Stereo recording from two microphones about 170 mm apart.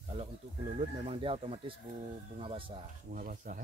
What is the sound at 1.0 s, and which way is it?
Speech, 30° right (ahead or behind).